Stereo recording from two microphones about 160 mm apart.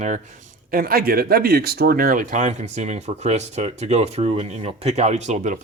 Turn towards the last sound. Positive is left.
turn(degrees=-50)  # may be behind; listen again after turning